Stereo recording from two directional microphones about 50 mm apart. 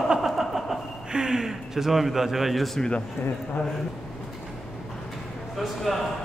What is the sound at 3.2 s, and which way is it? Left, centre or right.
Speech, left.